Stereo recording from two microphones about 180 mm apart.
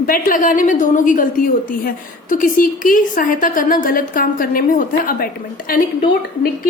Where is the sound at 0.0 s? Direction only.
50° left (ahead or behind).